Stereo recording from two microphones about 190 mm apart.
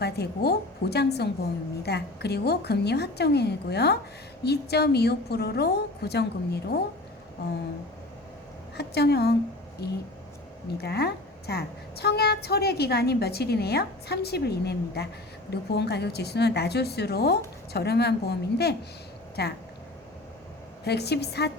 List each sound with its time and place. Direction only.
0.0 s a woman's voice: 60° left (ahead or behind)
8.8 s a woman's voice: 60° left (ahead or behind)
20.8 s a woman's voice: 60° left (ahead or behind)